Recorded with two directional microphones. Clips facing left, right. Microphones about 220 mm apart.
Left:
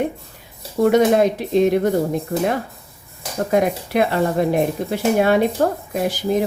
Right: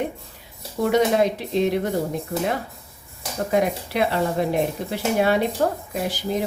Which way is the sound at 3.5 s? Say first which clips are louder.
Left 4 dB; 50° left (ahead or behind).